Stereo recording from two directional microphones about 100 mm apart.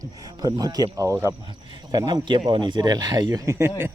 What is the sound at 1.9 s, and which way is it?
Speech, 45° right (ahead or behind).